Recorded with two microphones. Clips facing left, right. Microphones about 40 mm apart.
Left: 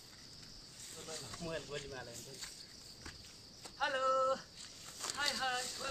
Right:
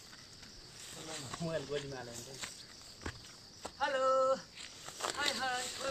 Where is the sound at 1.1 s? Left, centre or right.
Right.